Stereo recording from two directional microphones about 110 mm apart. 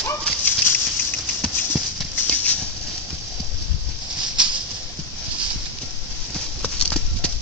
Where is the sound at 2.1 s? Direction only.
15° left (ahead or behind).